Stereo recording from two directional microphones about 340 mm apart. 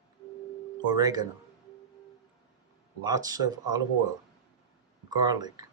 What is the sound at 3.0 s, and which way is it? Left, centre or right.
Speech, centre.